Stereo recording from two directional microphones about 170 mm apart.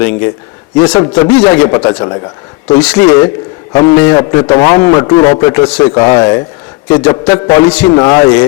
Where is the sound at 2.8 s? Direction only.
5° left (ahead or behind).